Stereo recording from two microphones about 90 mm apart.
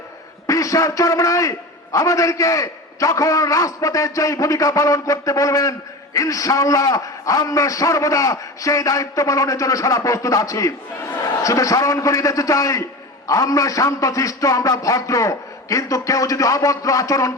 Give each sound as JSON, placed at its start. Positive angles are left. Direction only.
{"t": 0.4, "sound": "a man's voice", "side_deg": 40}